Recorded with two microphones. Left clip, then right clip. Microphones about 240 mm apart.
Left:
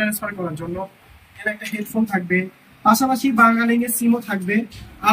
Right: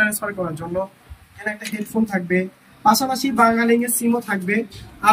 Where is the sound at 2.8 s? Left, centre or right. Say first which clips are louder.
Even; centre.